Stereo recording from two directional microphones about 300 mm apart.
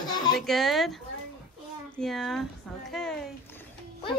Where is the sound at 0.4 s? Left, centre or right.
Centre.